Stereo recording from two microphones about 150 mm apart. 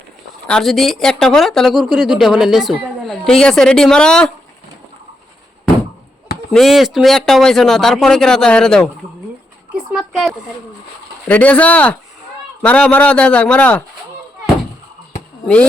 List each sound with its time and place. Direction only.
0.4 s speech: 5° left (ahead or behind)
6.5 s speech: centre (ahead or behind)
9.9 s speech: centre (ahead or behind)
11.3 s a man's voice: 10° left (ahead or behind)